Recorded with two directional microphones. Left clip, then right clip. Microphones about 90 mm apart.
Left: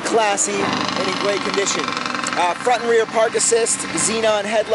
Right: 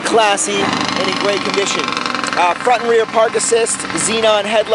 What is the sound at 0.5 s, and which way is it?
Speech, 35° right (ahead or behind).